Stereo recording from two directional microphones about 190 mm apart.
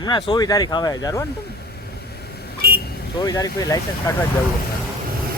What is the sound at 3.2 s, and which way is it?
Speech, 20° left (ahead or behind).